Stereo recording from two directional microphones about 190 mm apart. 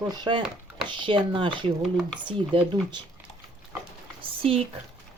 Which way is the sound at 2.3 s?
25° right (ahead or behind).